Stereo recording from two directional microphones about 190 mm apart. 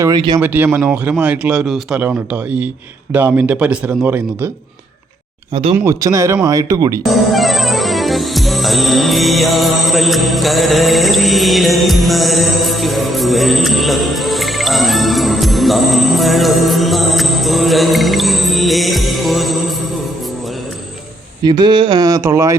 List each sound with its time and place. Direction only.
0.0 s speech: 20° right (ahead or behind)
0.3 s speech: 10° right (ahead or behind)
5.7 s speech: 15° right (ahead or behind)
7.1 s music: centre (ahead or behind)
21.4 s speech: 20° right (ahead or behind)